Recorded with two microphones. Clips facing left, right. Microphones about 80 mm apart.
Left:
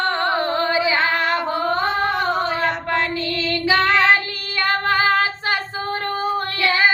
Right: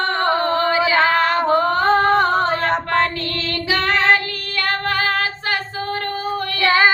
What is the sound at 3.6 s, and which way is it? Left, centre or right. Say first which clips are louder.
Female singing: left 1 dB; left.